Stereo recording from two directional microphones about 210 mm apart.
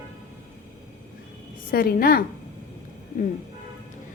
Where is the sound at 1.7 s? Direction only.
45° left (ahead or behind).